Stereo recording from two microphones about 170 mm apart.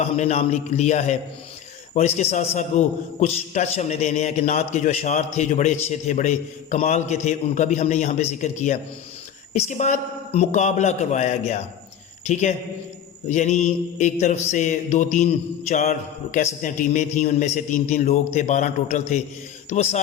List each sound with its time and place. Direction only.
0.0 s a man's voice: 40° left (ahead or behind)